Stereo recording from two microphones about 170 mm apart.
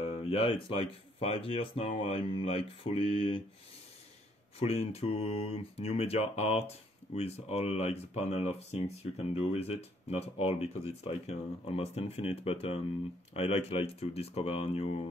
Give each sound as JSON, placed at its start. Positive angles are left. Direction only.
{"t": 0.0, "sound": "speech", "side_deg": 35}
{"t": 4.6, "sound": "speech", "side_deg": 35}